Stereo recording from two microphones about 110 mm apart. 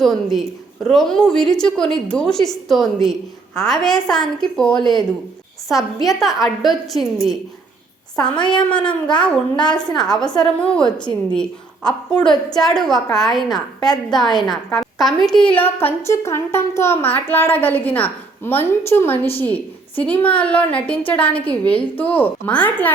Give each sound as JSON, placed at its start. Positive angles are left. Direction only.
{"t": 0.0, "sound": "a woman's voice", "side_deg": 0}
{"t": 8.4, "sound": "a child's voice", "side_deg": 10}
{"t": 15.5, "sound": "a child's voice", "side_deg": 20}